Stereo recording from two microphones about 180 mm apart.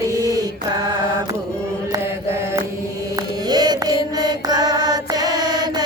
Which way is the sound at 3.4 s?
25° right (ahead or behind).